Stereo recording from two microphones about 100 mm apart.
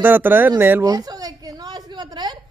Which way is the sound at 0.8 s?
40° right (ahead or behind).